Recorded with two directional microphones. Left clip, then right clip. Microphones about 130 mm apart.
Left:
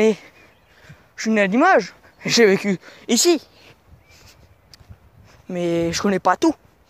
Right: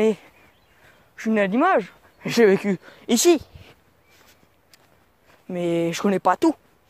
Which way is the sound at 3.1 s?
45° right (ahead or behind).